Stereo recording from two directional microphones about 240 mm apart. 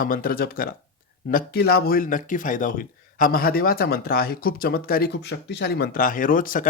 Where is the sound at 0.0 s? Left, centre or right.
Left.